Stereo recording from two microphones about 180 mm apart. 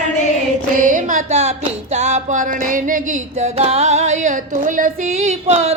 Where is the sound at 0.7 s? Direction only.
45° right (ahead or behind).